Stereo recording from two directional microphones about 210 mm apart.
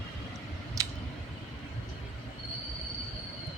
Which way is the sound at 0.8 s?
15° right (ahead or behind).